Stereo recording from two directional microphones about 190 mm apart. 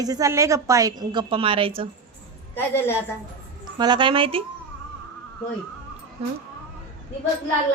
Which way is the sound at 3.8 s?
25° right (ahead or behind).